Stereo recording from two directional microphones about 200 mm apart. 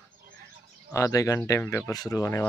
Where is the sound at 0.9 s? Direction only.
15° left (ahead or behind).